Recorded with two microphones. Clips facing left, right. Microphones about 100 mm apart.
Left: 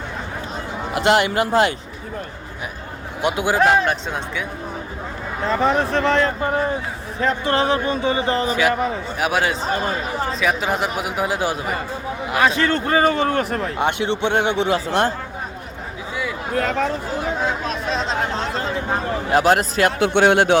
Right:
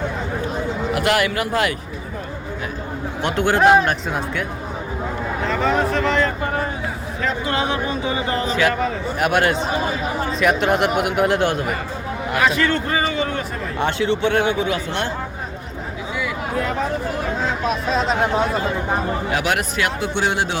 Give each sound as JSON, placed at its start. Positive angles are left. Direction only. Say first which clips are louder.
{"t": 0.9, "sound": "speech", "louder": "left 4 dB", "side_deg": 25}
{"t": 3.2, "sound": "speech", "louder": "even", "side_deg": 10}
{"t": 5.5, "sound": "speech", "louder": "left 2 dB", "side_deg": 25}
{"t": 7.4, "sound": "a sound", "louder": "left 3 dB", "side_deg": 35}
{"t": 8.4, "sound": "a man's voice", "louder": "even", "side_deg": 15}
{"t": 9.1, "sound": "speech", "louder": "right 4 dB", "side_deg": 5}
{"t": 12.4, "sound": "a sound", "louder": "left 1 dB", "side_deg": 25}
{"t": 13.7, "sound": "speech", "louder": "right 3 dB", "side_deg": 20}
{"t": 17.7, "sound": "speech", "louder": "right 3 dB", "side_deg": -5}
{"t": 19.3, "sound": "a sound", "louder": "left 9 dB", "side_deg": 35}
{"t": 20.0, "sound": "speech", "louder": "left 9 dB", "side_deg": 60}